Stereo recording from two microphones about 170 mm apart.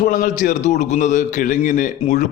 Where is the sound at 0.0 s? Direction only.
50° left (ahead or behind).